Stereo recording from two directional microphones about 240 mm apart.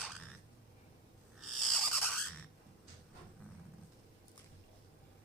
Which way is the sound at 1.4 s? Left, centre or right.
Centre.